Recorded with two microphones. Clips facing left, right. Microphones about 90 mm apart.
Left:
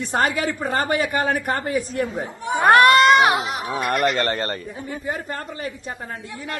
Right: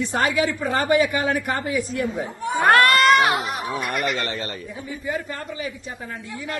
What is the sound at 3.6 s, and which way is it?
A woman's voice, 45° left (ahead or behind).